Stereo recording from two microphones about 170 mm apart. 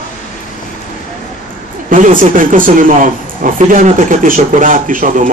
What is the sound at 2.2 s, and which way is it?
Speech, 50° right (ahead or behind).